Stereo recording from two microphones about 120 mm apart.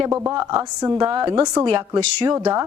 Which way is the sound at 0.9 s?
45° right (ahead or behind).